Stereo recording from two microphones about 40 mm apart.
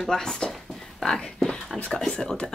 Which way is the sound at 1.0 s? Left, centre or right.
Centre.